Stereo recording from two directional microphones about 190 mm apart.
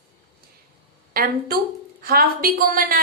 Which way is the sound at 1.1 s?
50° right (ahead or behind).